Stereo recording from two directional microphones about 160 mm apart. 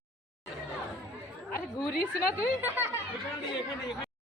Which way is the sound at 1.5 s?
65° left (ahead or behind).